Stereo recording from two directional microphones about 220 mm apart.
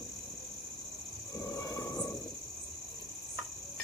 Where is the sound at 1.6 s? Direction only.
15° left (ahead or behind).